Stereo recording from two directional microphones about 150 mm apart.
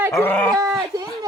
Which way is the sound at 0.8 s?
25° right (ahead or behind).